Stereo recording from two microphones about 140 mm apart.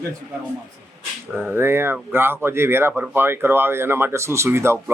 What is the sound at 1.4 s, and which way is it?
Speech, 15° right (ahead or behind).